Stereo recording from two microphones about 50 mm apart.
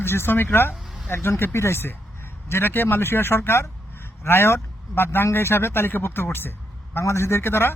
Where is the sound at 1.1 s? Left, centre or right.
Left.